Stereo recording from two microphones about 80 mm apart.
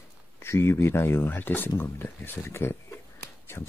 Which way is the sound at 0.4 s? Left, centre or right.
Left.